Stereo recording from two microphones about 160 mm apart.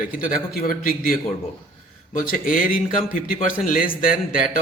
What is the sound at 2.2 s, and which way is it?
A man's voice, 60° left (ahead or behind).